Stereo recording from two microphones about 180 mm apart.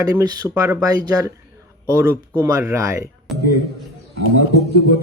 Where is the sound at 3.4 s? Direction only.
60° left (ahead or behind).